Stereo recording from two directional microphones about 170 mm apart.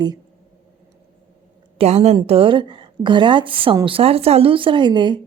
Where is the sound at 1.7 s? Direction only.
40° right (ahead or behind).